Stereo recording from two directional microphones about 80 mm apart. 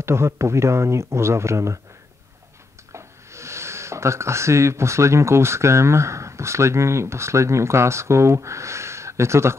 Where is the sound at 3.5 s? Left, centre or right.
Right.